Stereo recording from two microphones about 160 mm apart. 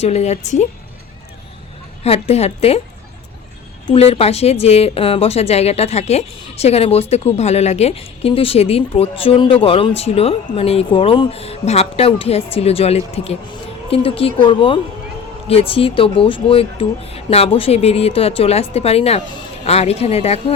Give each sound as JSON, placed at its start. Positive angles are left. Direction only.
{"t": 0.0, "sound": "a woman's voice", "side_deg": 45}
{"t": 2.0, "sound": "a woman's voice", "side_deg": 40}
{"t": 3.9, "sound": "a woman's voice", "side_deg": 40}